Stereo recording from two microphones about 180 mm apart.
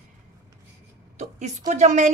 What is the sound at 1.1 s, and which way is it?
Speech, 40° right (ahead or behind).